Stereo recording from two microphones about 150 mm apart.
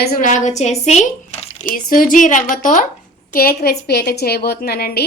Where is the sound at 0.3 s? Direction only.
55° left (ahead or behind).